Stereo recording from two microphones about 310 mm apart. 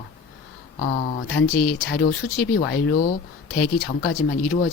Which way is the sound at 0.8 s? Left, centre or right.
Left.